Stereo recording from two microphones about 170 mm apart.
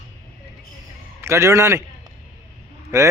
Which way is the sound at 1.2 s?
15° right (ahead or behind).